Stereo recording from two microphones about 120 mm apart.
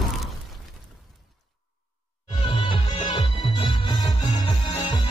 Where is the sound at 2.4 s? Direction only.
45° left (ahead or behind).